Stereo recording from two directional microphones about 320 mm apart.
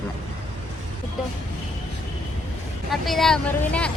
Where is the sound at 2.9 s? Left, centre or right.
Centre.